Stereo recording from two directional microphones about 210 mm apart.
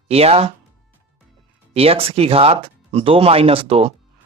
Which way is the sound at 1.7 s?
30° right (ahead or behind).